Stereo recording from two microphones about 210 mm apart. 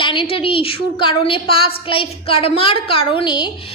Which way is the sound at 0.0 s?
25° left (ahead or behind).